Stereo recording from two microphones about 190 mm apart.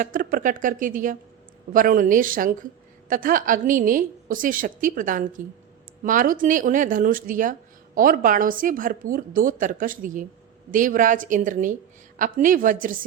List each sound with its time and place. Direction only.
0.0 s a woman's voice: 45° right (ahead or behind)